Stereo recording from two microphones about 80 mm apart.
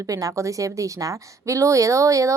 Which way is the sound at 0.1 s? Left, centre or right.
Right.